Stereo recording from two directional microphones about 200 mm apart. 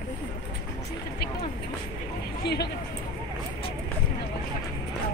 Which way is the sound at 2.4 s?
55° left (ahead or behind).